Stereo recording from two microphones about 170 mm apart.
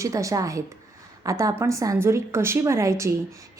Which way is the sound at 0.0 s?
20° right (ahead or behind).